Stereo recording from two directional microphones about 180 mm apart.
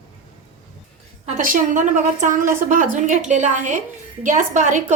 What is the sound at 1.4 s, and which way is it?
A woman's voice, 45° right (ahead or behind).